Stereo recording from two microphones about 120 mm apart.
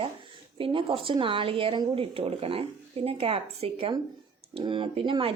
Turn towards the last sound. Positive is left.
turn(degrees=-45)  # may be behind; listen again after turning